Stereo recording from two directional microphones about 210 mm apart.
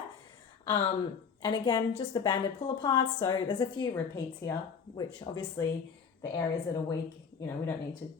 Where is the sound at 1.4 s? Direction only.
20° left (ahead or behind).